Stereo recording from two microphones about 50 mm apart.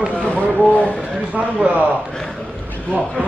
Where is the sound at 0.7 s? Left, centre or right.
Left.